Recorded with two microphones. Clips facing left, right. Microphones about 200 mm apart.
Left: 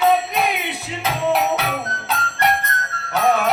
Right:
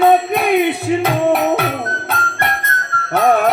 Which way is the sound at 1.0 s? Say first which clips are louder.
Right 1 dB; 55° right (ahead or behind).